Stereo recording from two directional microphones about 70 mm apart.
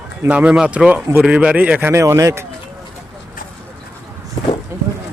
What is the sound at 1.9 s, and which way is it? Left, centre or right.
Speech, right.